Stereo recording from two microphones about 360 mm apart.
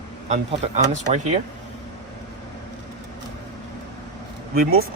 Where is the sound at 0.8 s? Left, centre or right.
Centre.